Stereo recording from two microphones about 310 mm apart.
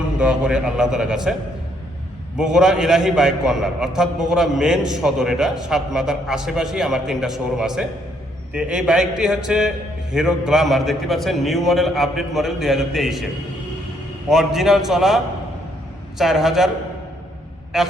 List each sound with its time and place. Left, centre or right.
0.2 s a man's voice: centre
2.4 s a man's voice: centre
14.3 s a man's voice: centre
17.7 s a man's voice: centre